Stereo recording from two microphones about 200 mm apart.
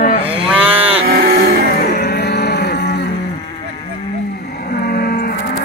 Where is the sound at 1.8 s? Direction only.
50° left (ahead or behind).